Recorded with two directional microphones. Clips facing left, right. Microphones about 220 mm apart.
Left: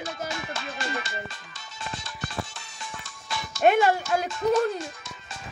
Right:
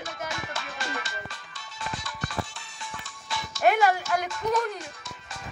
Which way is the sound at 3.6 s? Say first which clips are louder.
Left 2 dB; 25° left (ahead or behind).